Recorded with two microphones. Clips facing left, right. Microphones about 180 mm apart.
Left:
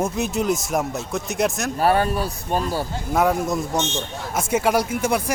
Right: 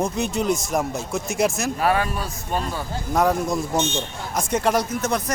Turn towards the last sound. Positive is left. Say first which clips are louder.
# left 2 dB
turn(degrees=10)  # may be behind; listen again after turning